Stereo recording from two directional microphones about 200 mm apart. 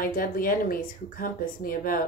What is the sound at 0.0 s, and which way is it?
Speech, 45° left (ahead or behind).